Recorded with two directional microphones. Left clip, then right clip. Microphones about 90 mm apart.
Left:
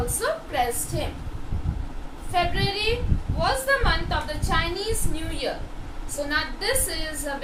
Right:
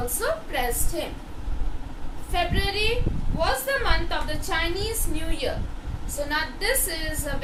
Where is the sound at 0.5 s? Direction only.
35° right (ahead or behind).